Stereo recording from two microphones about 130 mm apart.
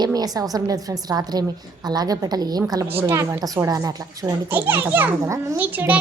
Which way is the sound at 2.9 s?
20° right (ahead or behind).